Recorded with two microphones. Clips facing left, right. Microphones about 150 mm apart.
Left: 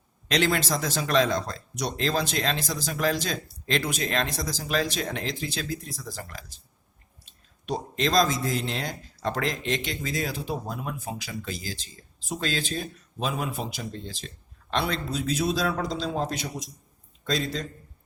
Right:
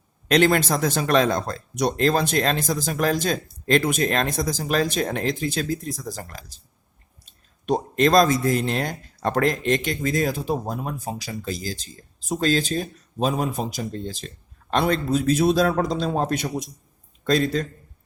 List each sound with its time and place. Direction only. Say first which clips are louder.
0.3 s speech: right 6 dB; 50° right (ahead or behind)